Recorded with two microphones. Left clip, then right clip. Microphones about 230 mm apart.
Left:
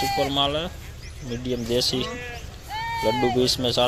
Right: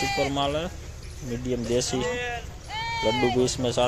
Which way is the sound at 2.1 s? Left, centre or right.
Right.